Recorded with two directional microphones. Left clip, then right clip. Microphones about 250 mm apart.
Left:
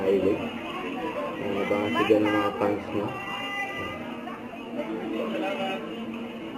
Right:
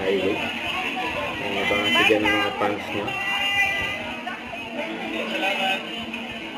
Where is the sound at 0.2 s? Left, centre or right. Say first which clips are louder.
Right 2 dB; centre.